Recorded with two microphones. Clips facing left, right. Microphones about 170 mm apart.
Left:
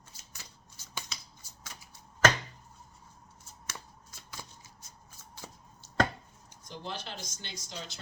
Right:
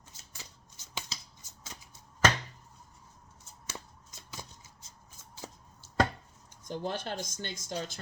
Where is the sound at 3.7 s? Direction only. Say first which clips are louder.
Right 2 dB; 20° right (ahead or behind).